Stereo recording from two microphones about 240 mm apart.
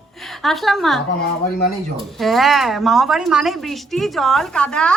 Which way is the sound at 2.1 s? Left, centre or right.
Centre.